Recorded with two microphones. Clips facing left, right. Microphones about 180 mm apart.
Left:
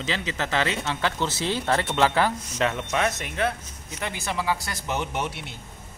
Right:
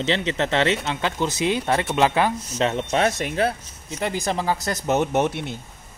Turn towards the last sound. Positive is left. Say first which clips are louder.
# right 9 dB
turn(degrees=-50)  # may be behind; listen again after turning